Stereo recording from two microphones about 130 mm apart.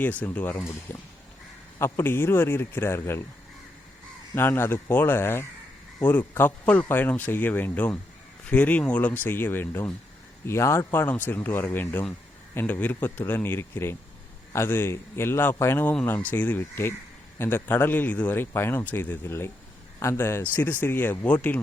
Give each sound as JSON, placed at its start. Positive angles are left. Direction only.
{"t": 0.0, "sound": "speech", "side_deg": 10}
{"t": 4.4, "sound": "speech", "side_deg": 15}